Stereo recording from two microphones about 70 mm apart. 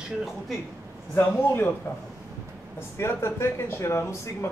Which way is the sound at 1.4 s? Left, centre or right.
Left.